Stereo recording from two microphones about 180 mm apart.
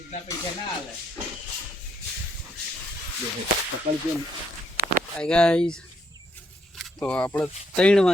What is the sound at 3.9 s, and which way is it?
Speech, 35° right (ahead or behind).